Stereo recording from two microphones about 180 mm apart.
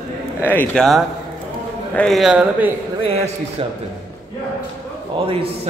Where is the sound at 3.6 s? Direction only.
30° right (ahead or behind).